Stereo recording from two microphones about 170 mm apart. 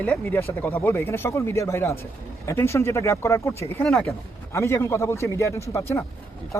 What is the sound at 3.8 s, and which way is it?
Speech, 5° left (ahead or behind).